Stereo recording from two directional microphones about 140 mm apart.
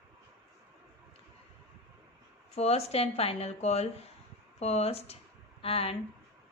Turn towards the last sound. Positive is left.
turn(degrees=45)  # may be behind; listen again after turning